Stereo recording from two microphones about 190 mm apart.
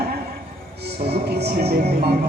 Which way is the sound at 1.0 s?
60° right (ahead or behind).